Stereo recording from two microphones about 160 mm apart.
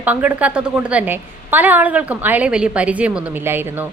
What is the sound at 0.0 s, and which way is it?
A woman's voice, 10° right (ahead or behind).